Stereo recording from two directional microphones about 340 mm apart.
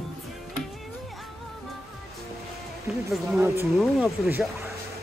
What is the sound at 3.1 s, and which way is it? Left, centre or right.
Speech, centre.